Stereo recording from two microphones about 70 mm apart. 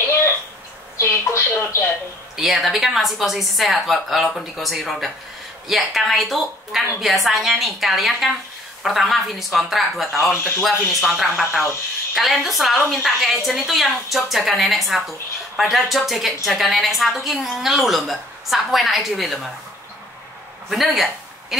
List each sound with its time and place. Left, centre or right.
0.9 s a sound: left
2.3 s a woman's voice: centre
20.7 s speech: centre